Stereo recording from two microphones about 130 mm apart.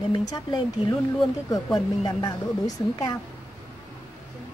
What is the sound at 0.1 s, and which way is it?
Speech, 35° left (ahead or behind).